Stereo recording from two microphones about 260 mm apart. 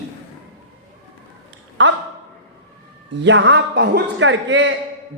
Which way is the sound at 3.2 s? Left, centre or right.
Right.